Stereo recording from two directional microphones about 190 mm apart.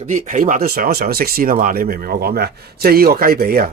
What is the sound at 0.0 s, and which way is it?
Speech, 40° right (ahead or behind).